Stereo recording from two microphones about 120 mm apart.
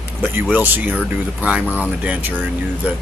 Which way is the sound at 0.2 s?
15° right (ahead or behind).